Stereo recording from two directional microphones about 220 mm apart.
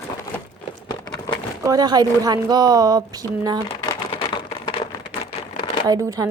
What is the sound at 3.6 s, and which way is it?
Shuffling cards, 20° left (ahead or behind).